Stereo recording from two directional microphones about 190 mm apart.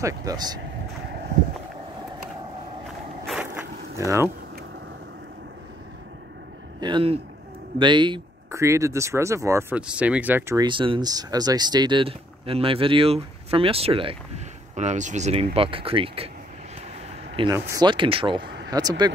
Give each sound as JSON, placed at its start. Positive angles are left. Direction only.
{"t": 0.0, "sound": "speech", "side_deg": -20}
{"t": 3.3, "sound": "boat", "side_deg": -10}
{"t": 6.8, "sound": "speech", "side_deg": -25}
{"t": 17.6, "sound": "speech", "side_deg": -20}